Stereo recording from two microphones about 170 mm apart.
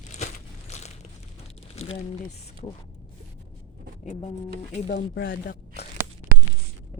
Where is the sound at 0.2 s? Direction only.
45° left (ahead or behind).